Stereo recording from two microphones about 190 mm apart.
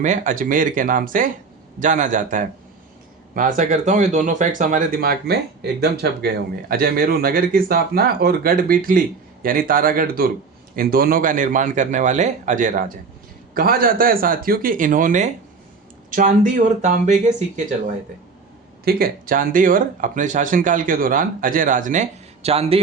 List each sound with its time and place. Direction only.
0.0 s speech: 40° right (ahead or behind)